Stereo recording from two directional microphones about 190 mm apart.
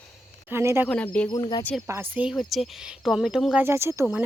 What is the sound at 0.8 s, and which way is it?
Speech, 5° left (ahead or behind).